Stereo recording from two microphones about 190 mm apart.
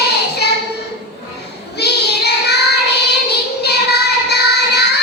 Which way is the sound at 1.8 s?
60° left (ahead or behind).